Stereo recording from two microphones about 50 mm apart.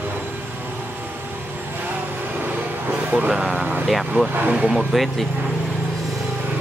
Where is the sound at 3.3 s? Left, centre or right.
Centre.